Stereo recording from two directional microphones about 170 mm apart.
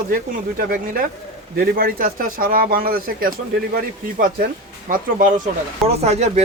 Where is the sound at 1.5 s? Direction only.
65° right (ahead or behind).